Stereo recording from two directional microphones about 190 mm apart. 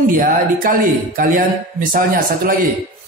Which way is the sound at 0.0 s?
45° right (ahead or behind).